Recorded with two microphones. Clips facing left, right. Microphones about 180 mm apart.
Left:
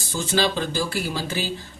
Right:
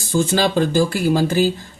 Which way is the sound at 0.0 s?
50° right (ahead or behind).